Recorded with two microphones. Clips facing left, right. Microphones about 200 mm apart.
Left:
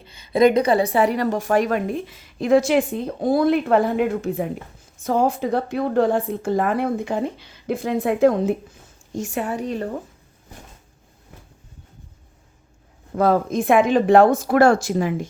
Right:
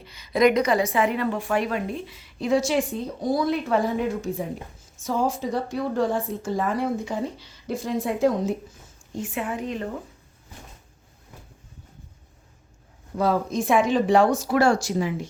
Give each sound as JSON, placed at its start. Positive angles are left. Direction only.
{"t": 0.0, "sound": "a sound", "side_deg": 30}
{"t": 0.9, "sound": "a woman's voice", "side_deg": 40}
{"t": 9.1, "sound": "a woman's voice", "side_deg": 45}
{"t": 13.1, "sound": "a woman's voice", "side_deg": 55}